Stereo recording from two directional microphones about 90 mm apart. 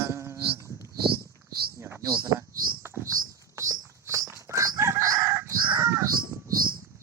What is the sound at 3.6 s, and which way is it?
Chicken, 35° right (ahead or behind).